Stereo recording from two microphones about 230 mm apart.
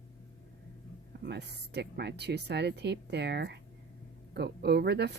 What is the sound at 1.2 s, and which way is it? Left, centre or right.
Speech, right.